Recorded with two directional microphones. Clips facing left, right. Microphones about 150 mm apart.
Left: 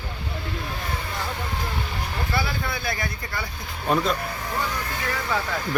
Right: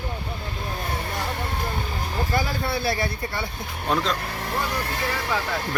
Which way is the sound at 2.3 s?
35° right (ahead or behind).